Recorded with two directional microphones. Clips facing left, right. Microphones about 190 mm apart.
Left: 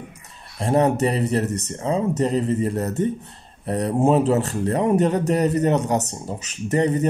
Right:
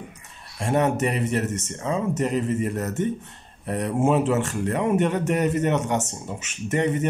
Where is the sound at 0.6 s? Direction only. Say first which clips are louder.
Left 3 dB; 35° left (ahead or behind).